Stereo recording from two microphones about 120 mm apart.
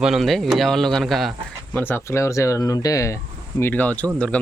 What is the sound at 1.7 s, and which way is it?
Speech, 20° left (ahead or behind).